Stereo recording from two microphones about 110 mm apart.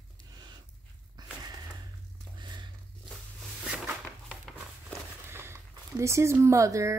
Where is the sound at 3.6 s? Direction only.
5° right (ahead or behind).